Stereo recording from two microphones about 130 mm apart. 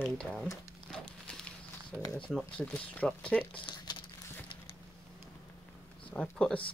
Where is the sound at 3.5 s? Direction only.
35° left (ahead or behind).